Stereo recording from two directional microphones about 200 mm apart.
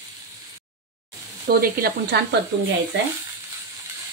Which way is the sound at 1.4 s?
50° right (ahead or behind).